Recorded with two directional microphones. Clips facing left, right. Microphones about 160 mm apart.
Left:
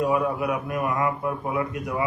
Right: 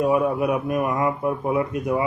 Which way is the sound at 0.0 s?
20° right (ahead or behind).